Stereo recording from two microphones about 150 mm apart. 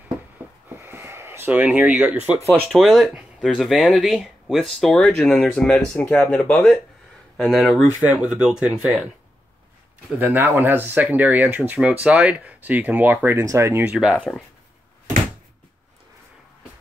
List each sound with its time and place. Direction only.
0.7 s a sound: 15° right (ahead or behind)
1.5 s speech: 5° right (ahead or behind)
10.1 s speech: 15° right (ahead or behind)
14.1 s speech: 5° left (ahead or behind)